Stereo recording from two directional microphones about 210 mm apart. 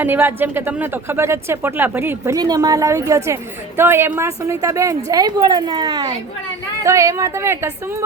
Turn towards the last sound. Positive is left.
turn(degrees=-10)  # may be behind; listen again after turning